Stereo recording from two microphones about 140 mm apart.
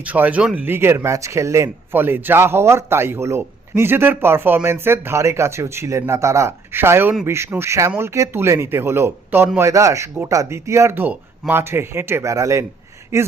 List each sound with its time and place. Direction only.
0.0 s speech: 10° right (ahead or behind)